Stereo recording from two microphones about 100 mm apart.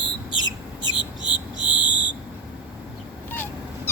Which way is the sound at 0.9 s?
55° left (ahead or behind).